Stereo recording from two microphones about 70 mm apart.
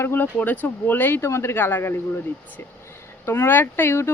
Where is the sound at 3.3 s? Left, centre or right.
Left.